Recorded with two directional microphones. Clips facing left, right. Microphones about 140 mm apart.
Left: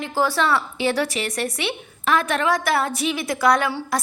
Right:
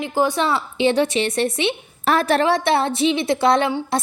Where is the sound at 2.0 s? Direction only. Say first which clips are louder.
Right 4 dB; 35° right (ahead or behind).